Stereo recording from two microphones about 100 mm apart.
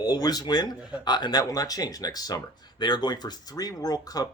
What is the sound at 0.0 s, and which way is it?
Speech, 40° left (ahead or behind).